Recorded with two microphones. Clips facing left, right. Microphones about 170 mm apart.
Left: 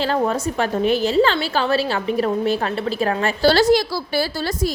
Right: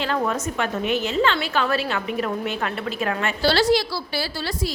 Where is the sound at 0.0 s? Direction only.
35° left (ahead or behind).